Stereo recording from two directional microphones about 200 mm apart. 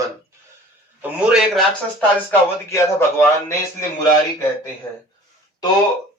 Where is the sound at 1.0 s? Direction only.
Centre (ahead or behind).